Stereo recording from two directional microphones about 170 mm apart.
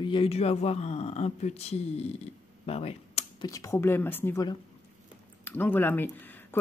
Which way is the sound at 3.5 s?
20° left (ahead or behind).